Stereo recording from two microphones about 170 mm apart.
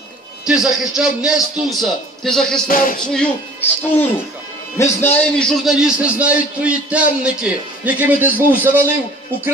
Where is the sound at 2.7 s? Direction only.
55° left (ahead or behind).